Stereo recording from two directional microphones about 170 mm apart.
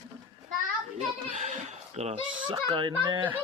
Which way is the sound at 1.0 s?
45° right (ahead or behind).